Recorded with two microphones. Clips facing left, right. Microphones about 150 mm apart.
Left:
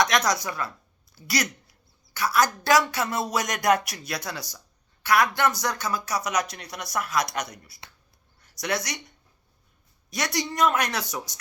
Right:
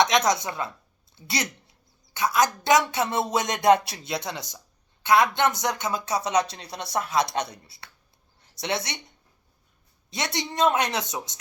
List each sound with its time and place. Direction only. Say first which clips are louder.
0.0 s speech: right 2 dB; 25° right (ahead or behind)